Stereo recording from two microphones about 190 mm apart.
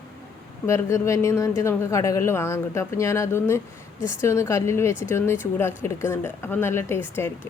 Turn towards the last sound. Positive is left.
turn(degrees=10)  # may be behind; listen again after turning